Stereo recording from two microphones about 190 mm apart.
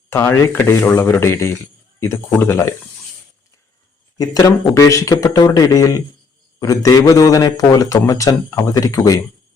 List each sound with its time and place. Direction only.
0.1 s a man's voice: 15° left (ahead or behind)
4.2 s a man's voice: 20° left (ahead or behind)